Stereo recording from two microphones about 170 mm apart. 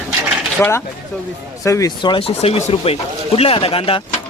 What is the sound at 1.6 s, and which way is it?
Speech, 20° left (ahead or behind).